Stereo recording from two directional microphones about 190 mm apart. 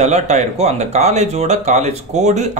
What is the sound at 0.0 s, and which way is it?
Speech, 35° right (ahead or behind).